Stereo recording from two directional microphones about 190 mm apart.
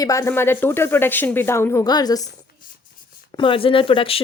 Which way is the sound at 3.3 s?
25° left (ahead or behind).